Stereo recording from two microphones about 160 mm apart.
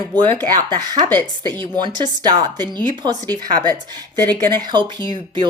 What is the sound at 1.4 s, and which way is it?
Speech, 30° right (ahead or behind).